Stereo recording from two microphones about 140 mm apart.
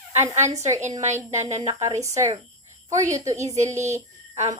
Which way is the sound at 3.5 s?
55° right (ahead or behind).